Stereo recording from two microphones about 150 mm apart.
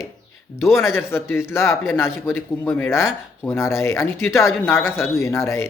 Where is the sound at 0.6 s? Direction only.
15° left (ahead or behind).